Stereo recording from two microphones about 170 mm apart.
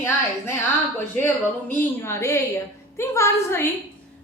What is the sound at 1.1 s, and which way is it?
A woman's voice, 10° left (ahead or behind).